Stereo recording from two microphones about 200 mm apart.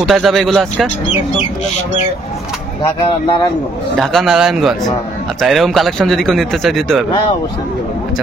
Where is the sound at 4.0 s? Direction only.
Centre (ahead or behind).